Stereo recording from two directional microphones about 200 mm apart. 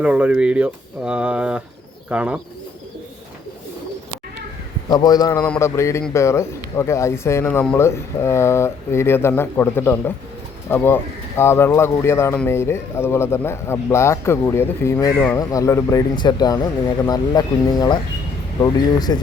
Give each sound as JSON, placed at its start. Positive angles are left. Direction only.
{"t": 0.0, "sound": "speech", "side_deg": -5}
{"t": 4.9, "sound": "a man's voice", "side_deg": 20}